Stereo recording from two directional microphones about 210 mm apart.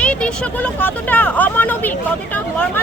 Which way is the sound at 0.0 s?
5° left (ahead or behind).